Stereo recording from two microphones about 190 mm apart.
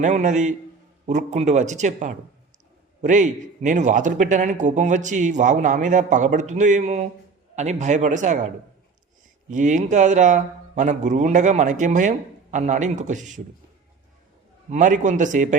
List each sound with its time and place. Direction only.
0.0 s a man's voice: 40° right (ahead or behind)
9.5 s a man's voice: 40° right (ahead or behind)
14.7 s a man's voice: 40° right (ahead or behind)